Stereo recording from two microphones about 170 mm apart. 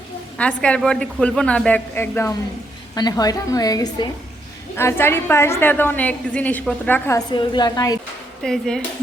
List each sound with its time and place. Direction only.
0.3 s a woman's voice: 5° left (ahead or behind); by 4.1 s 25° left (ahead or behind)
4.8 s a woman's voice: 15° left (ahead or behind)
8.4 s speech: 5° left (ahead or behind)